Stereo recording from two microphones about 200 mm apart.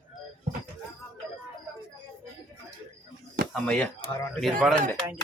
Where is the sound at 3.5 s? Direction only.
5° left (ahead or behind).